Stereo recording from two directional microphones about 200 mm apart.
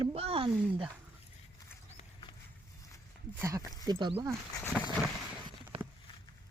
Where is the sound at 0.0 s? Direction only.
30° right (ahead or behind).